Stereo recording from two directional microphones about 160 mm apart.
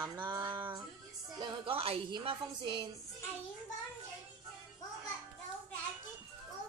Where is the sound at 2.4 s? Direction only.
30° right (ahead or behind).